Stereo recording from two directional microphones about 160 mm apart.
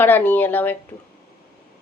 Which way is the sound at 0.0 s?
10° left (ahead or behind).